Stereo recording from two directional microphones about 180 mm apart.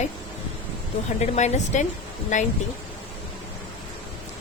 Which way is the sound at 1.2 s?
40° left (ahead or behind).